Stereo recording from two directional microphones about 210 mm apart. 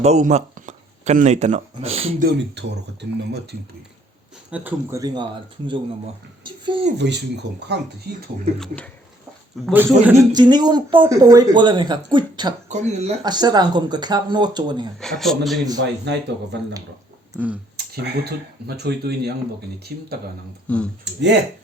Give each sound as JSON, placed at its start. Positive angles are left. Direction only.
{"t": 0.0, "sound": "speech", "side_deg": -35}
{"t": 2.2, "sound": "speech", "side_deg": -55}
{"t": 4.5, "sound": "speech", "side_deg": -10}
{"t": 7.0, "sound": "speech", "side_deg": -55}
{"t": 8.5, "sound": "speech", "side_deg": 5}
{"t": 9.7, "sound": "speech", "side_deg": -10}
{"t": 12.6, "sound": "speech", "side_deg": -35}
{"t": 13.2, "sound": "speech", "side_deg": -20}
{"t": 15.0, "sound": "speech", "side_deg": 0}
{"t": 15.8, "sound": "speech", "side_deg": -55}
{"t": 17.9, "sound": "speech", "side_deg": -50}
{"t": 20.7, "sound": "speech", "side_deg": 5}
{"t": 21.0, "sound": "speech", "side_deg": -55}